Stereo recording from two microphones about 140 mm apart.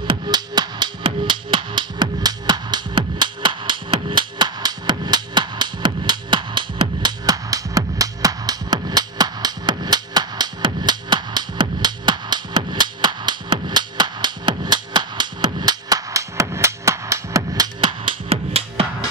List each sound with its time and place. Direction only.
0.0 s music: 35° right (ahead or behind)
18.3 s music: 45° right (ahead or behind)